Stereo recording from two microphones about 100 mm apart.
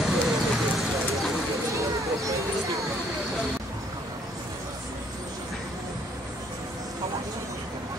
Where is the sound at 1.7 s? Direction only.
30° right (ahead or behind).